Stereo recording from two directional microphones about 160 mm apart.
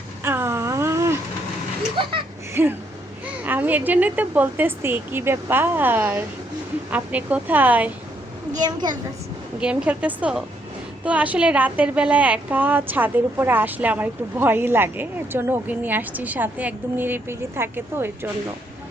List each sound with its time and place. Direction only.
0.3 s a sound: 15° right (ahead or behind)
2.6 s a woman's voice: 15° right (ahead or behind)
8.5 s a woman's voice: 25° right (ahead or behind)
9.6 s a woman's voice: 5° right (ahead or behind)